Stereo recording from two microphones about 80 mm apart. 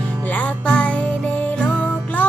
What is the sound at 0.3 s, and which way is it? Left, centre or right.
Music, centre.